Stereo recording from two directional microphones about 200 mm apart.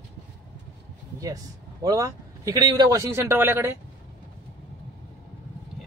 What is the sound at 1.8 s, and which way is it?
A man's voice, 15° right (ahead or behind).